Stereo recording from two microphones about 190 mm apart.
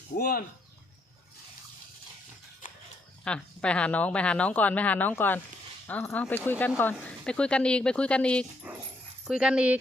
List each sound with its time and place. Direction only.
0.2 s speech: 50° left (ahead or behind)
3.2 s a woman's voice: 5° left (ahead or behind)
8.7 s dog: 5° right (ahead or behind)
9.2 s speech: 5° right (ahead or behind)